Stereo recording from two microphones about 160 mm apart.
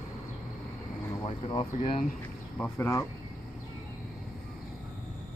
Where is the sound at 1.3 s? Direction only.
30° left (ahead or behind).